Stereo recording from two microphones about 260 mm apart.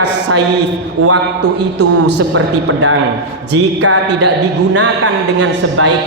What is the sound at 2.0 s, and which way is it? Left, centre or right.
Speech, right.